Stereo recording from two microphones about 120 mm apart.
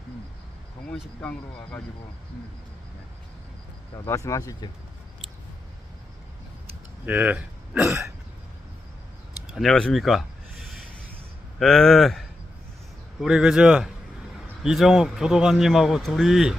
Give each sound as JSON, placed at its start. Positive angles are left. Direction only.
{"t": 1.2, "sound": "speech", "side_deg": 10}
{"t": 3.9, "sound": "speech", "side_deg": 25}
{"t": 7.0, "sound": "speech", "side_deg": -15}
{"t": 9.5, "sound": "speech", "side_deg": 0}
{"t": 11.6, "sound": "speech", "side_deg": 5}